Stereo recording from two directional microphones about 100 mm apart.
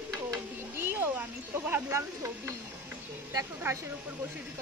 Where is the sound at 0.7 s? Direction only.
25° right (ahead or behind).